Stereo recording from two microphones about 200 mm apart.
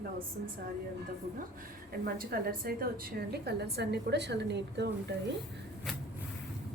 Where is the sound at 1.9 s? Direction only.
50° right (ahead or behind).